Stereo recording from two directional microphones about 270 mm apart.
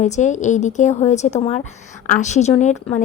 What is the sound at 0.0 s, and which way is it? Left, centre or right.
A woman's voice, left.